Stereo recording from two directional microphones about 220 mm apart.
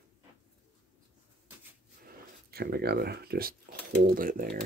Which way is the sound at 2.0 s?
45° right (ahead or behind).